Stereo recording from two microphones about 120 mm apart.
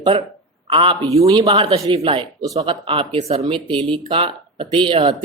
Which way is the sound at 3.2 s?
60° right (ahead or behind).